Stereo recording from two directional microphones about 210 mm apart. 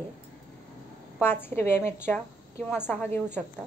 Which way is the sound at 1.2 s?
10° left (ahead or behind).